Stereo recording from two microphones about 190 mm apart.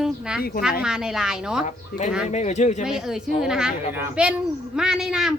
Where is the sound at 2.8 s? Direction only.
5° right (ahead or behind).